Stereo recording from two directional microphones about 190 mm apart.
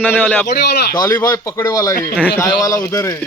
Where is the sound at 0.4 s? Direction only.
55° left (ahead or behind).